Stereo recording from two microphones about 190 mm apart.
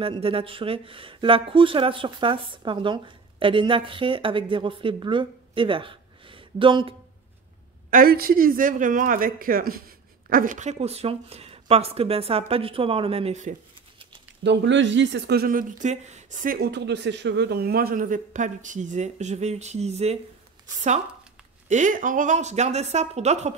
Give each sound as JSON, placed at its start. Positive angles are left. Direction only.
{"t": 0.0, "sound": "speech", "side_deg": -30}
{"t": 7.9, "sound": "speech", "side_deg": -50}
{"t": 14.4, "sound": "speech", "side_deg": -70}
{"t": 21.6, "sound": "speech", "side_deg": -40}